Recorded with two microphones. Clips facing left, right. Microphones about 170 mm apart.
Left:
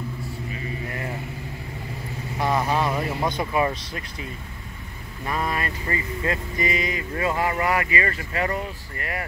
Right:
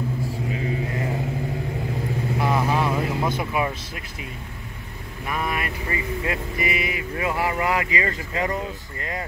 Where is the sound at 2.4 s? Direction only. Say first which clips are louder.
Left 1 dB; 5° right (ahead or behind).